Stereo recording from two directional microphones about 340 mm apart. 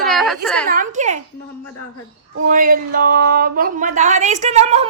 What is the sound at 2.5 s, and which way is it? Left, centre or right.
A woman's voice, right.